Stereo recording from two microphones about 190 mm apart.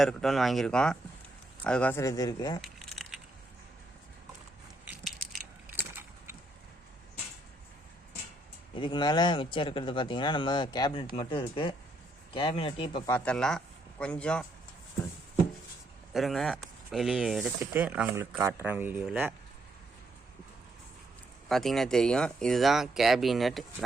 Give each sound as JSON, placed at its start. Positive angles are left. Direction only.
{"t": 0.0, "sound": "speech", "side_deg": 0}
{"t": 2.6, "sound": "a sound", "side_deg": 0}
{"t": 4.9, "sound": "crushing", "side_deg": -5}
{"t": 8.7, "sound": "speech", "side_deg": 25}
{"t": 13.1, "sound": "speech", "side_deg": 10}
{"t": 16.1, "sound": "speech", "side_deg": 0}
{"t": 21.5, "sound": "speech", "side_deg": 0}